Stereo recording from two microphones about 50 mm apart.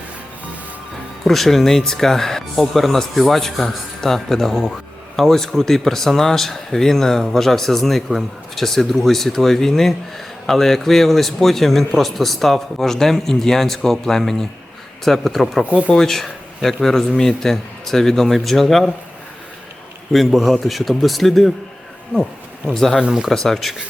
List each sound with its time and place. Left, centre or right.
1.2 s a man's voice: centre
20.1 s a man's voice: centre
22.7 s a man's voice: centre
23.0 s speech: centre
23.3 s a man's voice: centre